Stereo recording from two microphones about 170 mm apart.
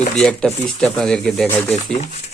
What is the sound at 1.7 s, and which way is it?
Speech, 40° left (ahead or behind).